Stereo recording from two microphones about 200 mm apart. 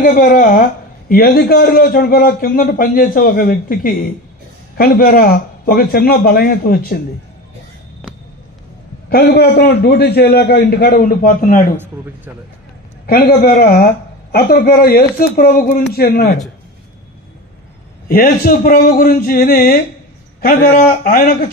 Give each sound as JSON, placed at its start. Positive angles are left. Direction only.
{"t": 0.0, "sound": "a man's voice", "side_deg": 45}
{"t": 9.1, "sound": "a man's voice", "side_deg": 55}
{"t": 13.0, "sound": "a man's voice", "side_deg": 50}
{"t": 18.0, "sound": "a man's voice", "side_deg": 50}